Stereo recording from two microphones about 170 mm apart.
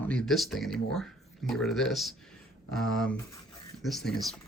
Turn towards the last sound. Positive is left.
turn(degrees=0)  # may be behind; listen again after turning